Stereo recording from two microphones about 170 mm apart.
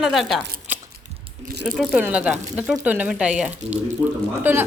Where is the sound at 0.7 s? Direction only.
10° right (ahead or behind).